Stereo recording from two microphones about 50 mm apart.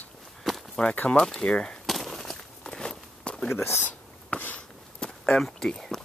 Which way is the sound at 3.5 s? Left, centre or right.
Left.